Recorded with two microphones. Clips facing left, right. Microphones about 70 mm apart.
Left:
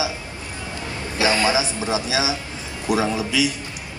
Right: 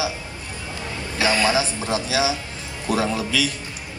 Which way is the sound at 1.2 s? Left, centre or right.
Left.